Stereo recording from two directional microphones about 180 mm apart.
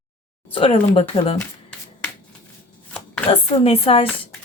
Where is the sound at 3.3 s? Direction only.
30° left (ahead or behind).